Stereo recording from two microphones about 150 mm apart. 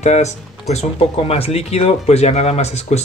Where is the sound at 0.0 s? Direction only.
50° left (ahead or behind).